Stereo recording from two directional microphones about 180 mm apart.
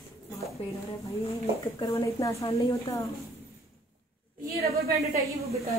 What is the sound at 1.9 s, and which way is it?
A woman's voice, 15° left (ahead or behind).